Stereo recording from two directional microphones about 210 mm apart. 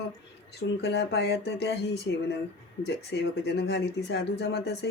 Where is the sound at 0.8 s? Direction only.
50° left (ahead or behind).